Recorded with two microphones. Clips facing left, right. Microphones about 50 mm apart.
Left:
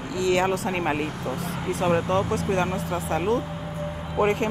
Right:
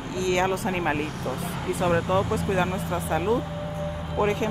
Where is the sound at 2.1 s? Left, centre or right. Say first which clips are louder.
Even; left.